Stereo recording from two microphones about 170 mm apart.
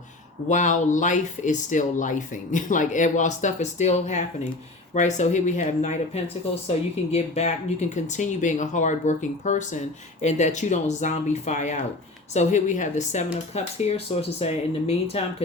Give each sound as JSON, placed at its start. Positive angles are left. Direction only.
{"t": 0.4, "sound": "speech", "side_deg": 45}